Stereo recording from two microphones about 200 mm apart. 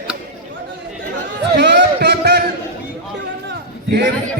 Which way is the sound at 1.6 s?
60° right (ahead or behind).